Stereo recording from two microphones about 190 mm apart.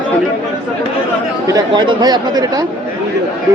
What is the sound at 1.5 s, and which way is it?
Speech, 25° right (ahead or behind).